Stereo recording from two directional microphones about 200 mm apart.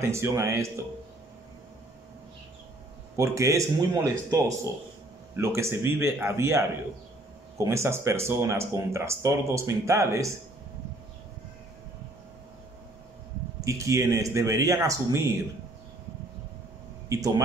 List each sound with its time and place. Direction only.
0.0 s speech: 15° right (ahead or behind)
3.2 s speech: 15° right (ahead or behind)
13.7 s speech: 15° right (ahead or behind)